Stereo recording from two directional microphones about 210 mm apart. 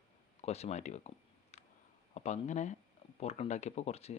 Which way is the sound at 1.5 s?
30° left (ahead or behind).